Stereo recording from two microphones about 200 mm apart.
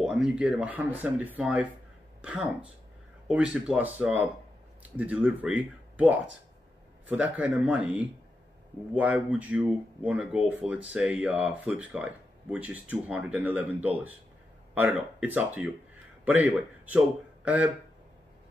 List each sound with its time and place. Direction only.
0.0 s a man's voice: 5° right (ahead or behind)